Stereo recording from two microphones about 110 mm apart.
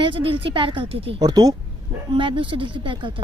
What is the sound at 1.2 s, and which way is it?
Speech, 35° right (ahead or behind).